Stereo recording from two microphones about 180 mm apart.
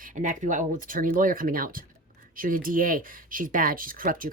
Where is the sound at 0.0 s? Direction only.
45° right (ahead or behind).